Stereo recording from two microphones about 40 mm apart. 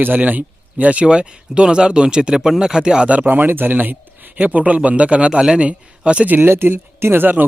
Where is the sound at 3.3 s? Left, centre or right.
Right.